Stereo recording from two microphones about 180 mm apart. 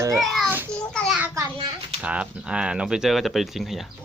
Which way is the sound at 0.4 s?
10° right (ahead or behind).